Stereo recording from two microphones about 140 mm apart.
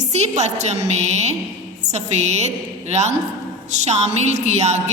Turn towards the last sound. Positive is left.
turn(degrees=-55)  # may be behind; listen again after turning